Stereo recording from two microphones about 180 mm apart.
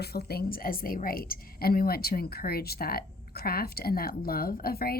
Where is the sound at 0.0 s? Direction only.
60° left (ahead or behind).